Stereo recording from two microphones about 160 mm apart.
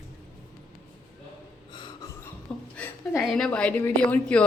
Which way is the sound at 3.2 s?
Centre (ahead or behind).